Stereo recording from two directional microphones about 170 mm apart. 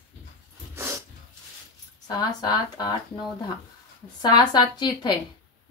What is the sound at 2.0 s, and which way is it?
Speech, 25° left (ahead or behind).